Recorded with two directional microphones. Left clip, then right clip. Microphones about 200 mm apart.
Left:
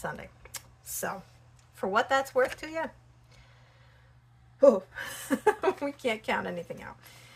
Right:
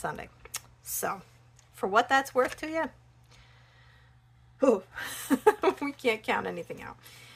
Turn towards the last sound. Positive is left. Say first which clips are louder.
# right 1 dB
turn(degrees=-40)  # may be behind; listen again after turning